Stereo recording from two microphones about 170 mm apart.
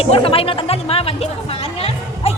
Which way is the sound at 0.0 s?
35° left (ahead or behind).